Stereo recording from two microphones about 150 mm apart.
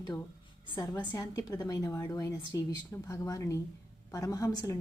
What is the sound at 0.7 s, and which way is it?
A woman's voice, 25° left (ahead or behind).